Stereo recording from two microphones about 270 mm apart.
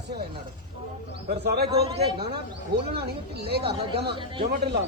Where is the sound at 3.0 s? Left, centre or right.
Right.